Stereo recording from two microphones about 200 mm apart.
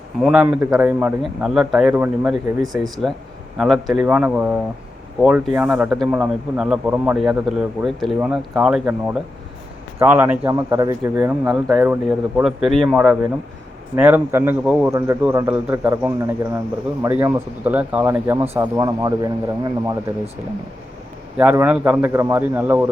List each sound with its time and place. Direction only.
0.2 s speech: 5° right (ahead or behind)
21.3 s speech: 10° right (ahead or behind)